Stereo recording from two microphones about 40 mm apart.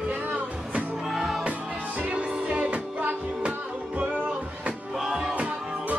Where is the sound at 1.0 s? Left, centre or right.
Centre.